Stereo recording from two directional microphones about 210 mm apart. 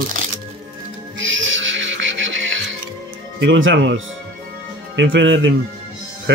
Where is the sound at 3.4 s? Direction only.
65° right (ahead or behind).